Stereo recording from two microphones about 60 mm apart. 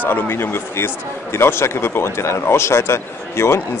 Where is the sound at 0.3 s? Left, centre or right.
Left.